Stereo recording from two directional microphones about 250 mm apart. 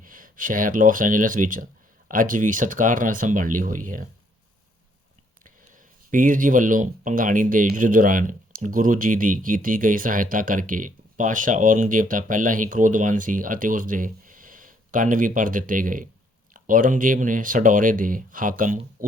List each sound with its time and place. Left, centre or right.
0.0 s speech: right
6.1 s speech: right